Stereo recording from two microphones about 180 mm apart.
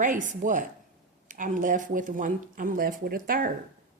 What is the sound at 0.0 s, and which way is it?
A woman's voice, 45° right (ahead or behind).